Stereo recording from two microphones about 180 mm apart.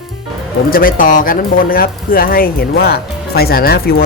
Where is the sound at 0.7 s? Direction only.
50° left (ahead or behind).